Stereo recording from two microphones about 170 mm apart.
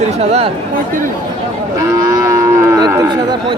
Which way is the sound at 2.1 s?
20° right (ahead or behind).